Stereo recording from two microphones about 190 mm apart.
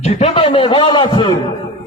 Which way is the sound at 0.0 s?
35° left (ahead or behind).